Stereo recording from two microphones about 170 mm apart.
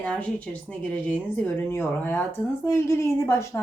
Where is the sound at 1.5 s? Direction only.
10° left (ahead or behind).